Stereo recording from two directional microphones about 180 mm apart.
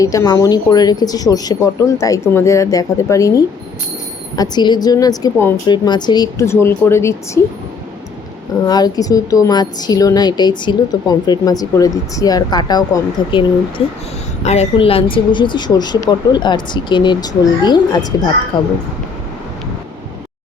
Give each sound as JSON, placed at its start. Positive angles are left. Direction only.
{"t": 0.0, "sound": "a woman's voice", "side_deg": 20}
{"t": 8.6, "sound": "a woman's voice", "side_deg": 20}
{"t": 14.4, "sound": "a woman's voice", "side_deg": 35}